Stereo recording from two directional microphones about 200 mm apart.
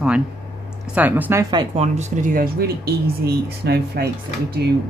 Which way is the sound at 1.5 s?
20° right (ahead or behind).